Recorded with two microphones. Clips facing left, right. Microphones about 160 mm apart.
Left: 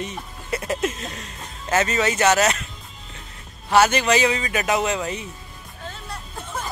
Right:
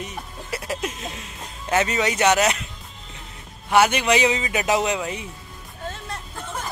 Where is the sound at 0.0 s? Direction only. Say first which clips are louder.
Left 2 dB; 5° right (ahead or behind).